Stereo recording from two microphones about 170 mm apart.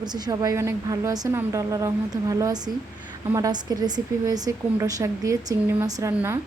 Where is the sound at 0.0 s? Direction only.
25° right (ahead or behind).